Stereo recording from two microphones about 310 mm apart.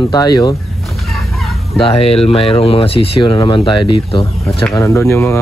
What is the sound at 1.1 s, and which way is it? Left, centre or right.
Fowl, centre.